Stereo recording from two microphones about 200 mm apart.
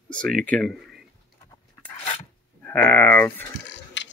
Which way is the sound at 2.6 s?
5° left (ahead or behind).